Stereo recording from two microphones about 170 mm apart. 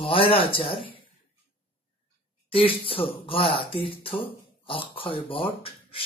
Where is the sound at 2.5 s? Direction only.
35° left (ahead or behind).